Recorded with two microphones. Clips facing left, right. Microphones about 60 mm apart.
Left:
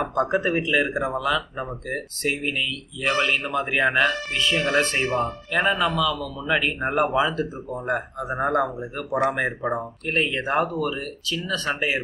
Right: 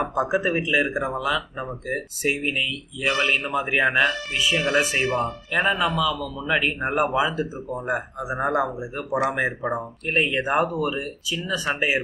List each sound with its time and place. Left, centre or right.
0.0 s speech: centre